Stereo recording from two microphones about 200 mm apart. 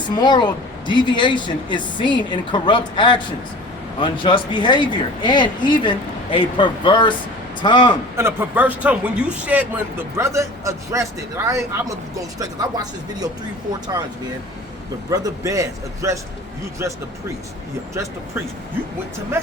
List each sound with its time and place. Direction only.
0.1 s speech: 20° left (ahead or behind)
8.1 s speech: 10° right (ahead or behind)
15.1 s speech: 15° right (ahead or behind)
17.9 s speech: 15° right (ahead or behind)